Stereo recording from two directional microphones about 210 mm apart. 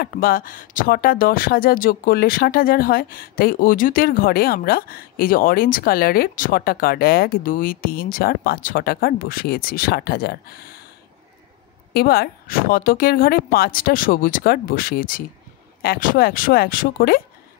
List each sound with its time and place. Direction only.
0.0 s speech: 45° left (ahead or behind)
11.9 s speech: 45° left (ahead or behind)